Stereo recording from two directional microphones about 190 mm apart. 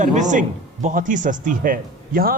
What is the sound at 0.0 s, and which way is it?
Speech, 40° right (ahead or behind).